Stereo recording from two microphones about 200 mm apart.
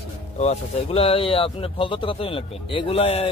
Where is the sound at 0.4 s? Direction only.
30° left (ahead or behind).